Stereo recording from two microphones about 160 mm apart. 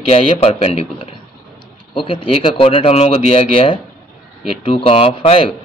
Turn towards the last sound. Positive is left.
turn(degrees=35)  # may be behind; listen again after turning